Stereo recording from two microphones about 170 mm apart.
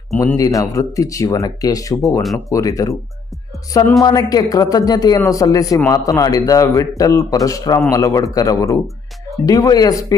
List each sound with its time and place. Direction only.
0.3 s speech: 20° left (ahead or behind)
4.0 s speech: 20° left (ahead or behind)